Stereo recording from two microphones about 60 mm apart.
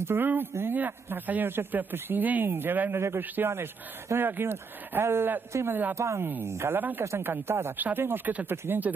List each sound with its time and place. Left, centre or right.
0.0 s a man's voice: right